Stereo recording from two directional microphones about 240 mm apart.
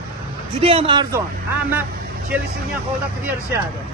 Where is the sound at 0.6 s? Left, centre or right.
Right.